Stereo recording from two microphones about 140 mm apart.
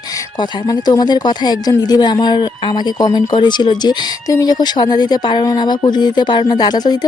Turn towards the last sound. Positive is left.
turn(degrees=30)  # may be behind; listen again after turning